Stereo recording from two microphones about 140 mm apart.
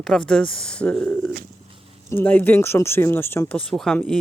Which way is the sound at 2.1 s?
15° left (ahead or behind).